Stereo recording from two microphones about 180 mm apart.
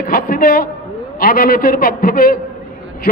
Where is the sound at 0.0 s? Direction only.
55° left (ahead or behind).